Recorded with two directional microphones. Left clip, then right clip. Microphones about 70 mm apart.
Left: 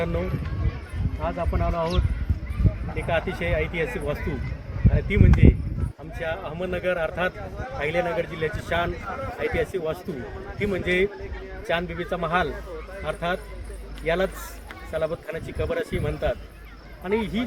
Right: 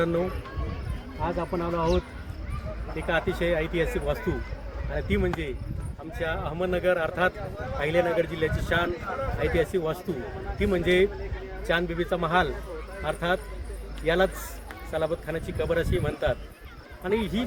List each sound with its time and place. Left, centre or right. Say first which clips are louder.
0.0 s a man's voice: right 2 dB; right
1.4 s speech: left 2 dB; centre
2.9 s a man's voice: left 1 dB; right